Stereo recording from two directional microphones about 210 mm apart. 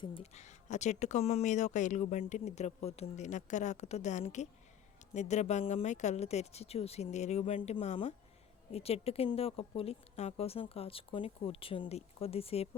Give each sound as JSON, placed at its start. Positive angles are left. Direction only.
{"t": 0.0, "sound": "speech", "side_deg": 25}